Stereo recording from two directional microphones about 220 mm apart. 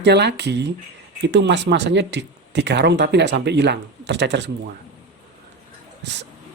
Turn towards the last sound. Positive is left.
turn(degrees=-50)  # may be behind; listen again after turning